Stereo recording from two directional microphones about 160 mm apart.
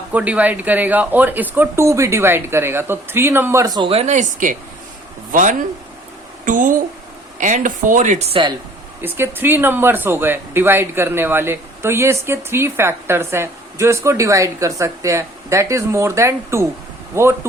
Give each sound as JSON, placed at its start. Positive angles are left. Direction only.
{"t": 0.1, "sound": "speech", "side_deg": -10}
{"t": 9.0, "sound": "speech", "side_deg": -15}